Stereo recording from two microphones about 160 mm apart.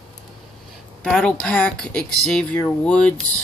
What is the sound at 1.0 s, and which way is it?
Speech, 5° left (ahead or behind).